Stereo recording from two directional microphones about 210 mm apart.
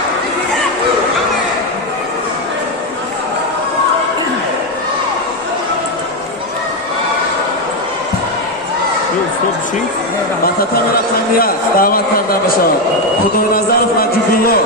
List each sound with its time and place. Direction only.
11.3 s a man's voice: 45° left (ahead or behind)